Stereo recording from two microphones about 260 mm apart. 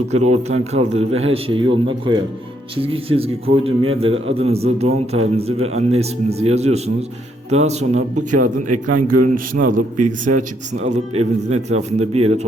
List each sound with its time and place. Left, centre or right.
0.3 s a man's voice: right
8.6 s a man's voice: right
9.2 s a man's voice: right